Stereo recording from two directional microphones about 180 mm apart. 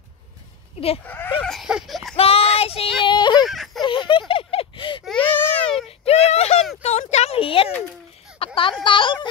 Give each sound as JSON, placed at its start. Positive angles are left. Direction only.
{"t": 1.0, "sound": "speech", "side_deg": 10}
{"t": 1.4, "sound": "a sound", "side_deg": 0}
{"t": 2.1, "sound": "speech", "side_deg": 35}
{"t": 3.4, "sound": "speech", "side_deg": 0}
{"t": 3.8, "sound": "speech", "side_deg": 30}
{"t": 4.3, "sound": "a sound", "side_deg": 30}
{"t": 5.0, "sound": "baby cry", "side_deg": 5}
{"t": 5.9, "sound": "a sound", "side_deg": 35}
{"t": 8.8, "sound": "speech", "side_deg": 25}